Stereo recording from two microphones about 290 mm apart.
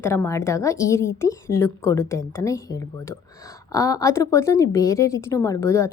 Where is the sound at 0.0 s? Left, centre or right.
Centre.